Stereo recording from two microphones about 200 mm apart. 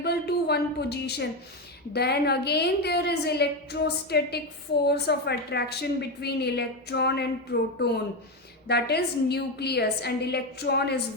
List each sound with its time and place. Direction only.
0.0 s a woman's voice: 55° left (ahead or behind)